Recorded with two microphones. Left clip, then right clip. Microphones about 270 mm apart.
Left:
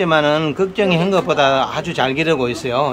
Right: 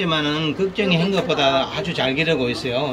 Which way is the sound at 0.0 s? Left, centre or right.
Centre.